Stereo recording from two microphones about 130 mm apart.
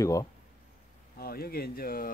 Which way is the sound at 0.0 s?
25° left (ahead or behind).